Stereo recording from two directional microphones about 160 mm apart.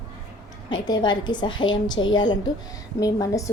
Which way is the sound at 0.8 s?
30° left (ahead or behind).